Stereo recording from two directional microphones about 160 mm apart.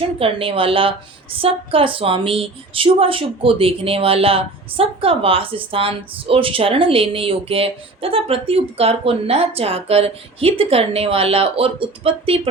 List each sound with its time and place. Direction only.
0.2 s a woman's voice: 35° right (ahead or behind)